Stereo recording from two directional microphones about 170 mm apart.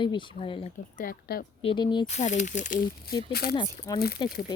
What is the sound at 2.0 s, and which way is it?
Speech, 40° left (ahead or behind).